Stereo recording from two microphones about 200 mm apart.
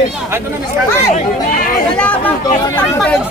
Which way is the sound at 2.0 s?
5° left (ahead or behind).